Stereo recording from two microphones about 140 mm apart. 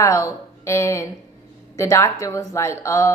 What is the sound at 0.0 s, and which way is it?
A woman's voice, 20° left (ahead or behind).